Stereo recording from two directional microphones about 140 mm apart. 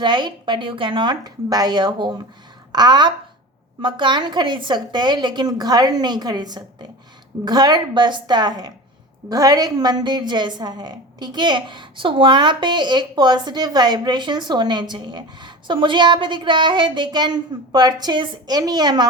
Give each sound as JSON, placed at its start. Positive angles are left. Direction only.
{"t": 0.0, "sound": "a woman's voice", "side_deg": -35}